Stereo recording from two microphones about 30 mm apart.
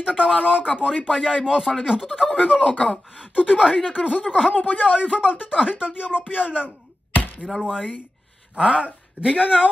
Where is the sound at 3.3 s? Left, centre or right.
Right.